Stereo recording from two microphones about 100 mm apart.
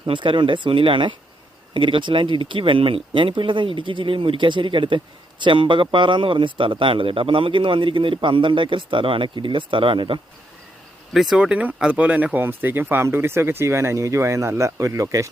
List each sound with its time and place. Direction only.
0.0 s a man's voice: 55° right (ahead or behind)
11.1 s speech: 5° right (ahead or behind); by 15.3 s 30° right (ahead or behind)